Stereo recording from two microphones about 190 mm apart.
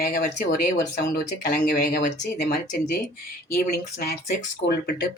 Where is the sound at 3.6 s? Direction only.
50° left (ahead or behind).